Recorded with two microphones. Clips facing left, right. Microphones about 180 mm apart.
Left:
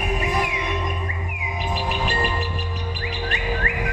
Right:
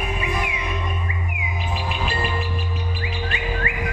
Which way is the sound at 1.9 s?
40° left (ahead or behind).